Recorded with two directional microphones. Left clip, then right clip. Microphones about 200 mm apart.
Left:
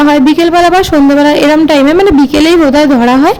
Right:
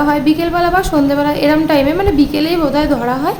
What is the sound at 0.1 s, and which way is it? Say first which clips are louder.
A woman's voice: left 7 dB; 40° left (ahead or behind).